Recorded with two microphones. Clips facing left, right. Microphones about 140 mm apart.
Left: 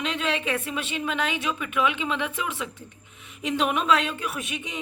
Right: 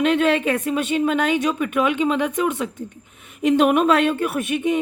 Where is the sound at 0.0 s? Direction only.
55° right (ahead or behind).